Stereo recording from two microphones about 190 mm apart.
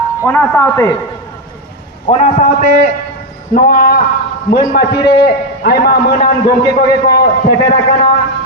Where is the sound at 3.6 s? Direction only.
55° left (ahead or behind).